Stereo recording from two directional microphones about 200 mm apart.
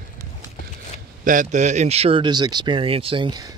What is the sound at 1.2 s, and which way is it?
Speech, 40° right (ahead or behind).